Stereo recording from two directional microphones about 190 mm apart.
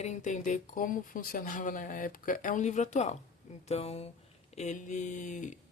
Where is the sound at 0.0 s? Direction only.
40° left (ahead or behind).